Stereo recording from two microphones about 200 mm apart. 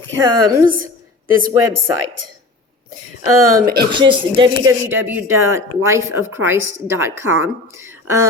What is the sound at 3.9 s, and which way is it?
Speech, 25° right (ahead or behind).